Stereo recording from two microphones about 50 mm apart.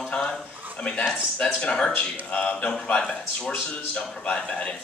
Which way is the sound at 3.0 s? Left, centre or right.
Centre.